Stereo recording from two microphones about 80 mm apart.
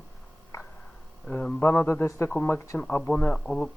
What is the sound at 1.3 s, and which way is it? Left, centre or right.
A man's voice, left.